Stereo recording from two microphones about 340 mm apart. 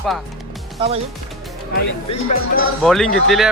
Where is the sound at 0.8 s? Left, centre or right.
Centre.